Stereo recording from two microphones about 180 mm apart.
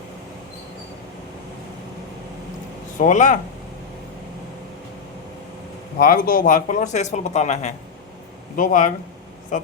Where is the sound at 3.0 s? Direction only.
45° left (ahead or behind).